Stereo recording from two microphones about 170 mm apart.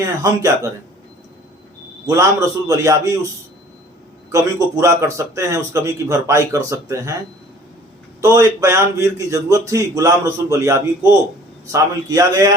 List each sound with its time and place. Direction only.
0.2 s a man's voice: 20° right (ahead or behind)
2.0 s a man's voice: 20° right (ahead or behind)
4.3 s a man's voice: 20° right (ahead or behind)
8.2 s a man's voice: 20° right (ahead or behind)